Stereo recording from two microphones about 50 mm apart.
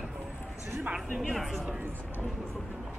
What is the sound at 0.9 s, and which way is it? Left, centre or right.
Speech, centre.